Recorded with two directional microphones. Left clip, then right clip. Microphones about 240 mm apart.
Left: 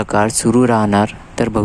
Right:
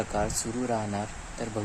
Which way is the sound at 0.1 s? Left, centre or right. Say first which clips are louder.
Left 16 dB; left.